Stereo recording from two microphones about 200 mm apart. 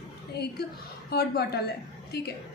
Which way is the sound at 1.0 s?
50° left (ahead or behind).